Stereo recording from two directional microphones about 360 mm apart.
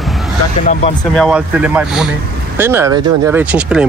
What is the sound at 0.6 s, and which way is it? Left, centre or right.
Speech, centre.